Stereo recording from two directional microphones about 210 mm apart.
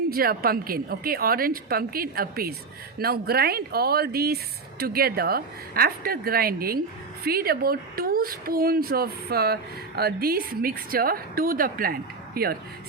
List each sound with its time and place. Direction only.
0.1 s speech: 45° right (ahead or behind)